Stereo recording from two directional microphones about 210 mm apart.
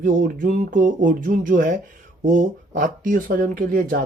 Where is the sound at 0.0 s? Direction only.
40° right (ahead or behind).